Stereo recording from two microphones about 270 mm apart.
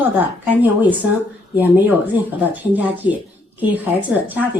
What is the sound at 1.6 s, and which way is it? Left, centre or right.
Speech, centre.